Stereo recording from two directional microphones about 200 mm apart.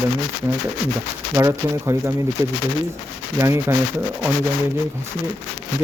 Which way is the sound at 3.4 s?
15° right (ahead or behind).